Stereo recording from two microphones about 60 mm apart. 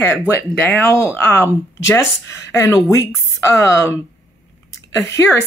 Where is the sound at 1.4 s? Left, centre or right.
Left.